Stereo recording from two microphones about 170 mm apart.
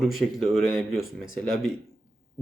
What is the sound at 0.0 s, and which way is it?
Speech, centre (ahead or behind).